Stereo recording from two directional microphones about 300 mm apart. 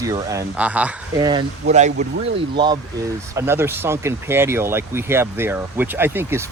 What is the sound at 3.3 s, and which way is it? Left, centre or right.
Speech, centre.